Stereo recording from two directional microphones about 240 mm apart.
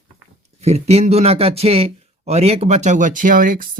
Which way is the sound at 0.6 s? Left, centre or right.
Right.